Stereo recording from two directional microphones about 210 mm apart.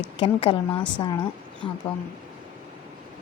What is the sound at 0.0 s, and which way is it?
A woman's voice, 25° left (ahead or behind).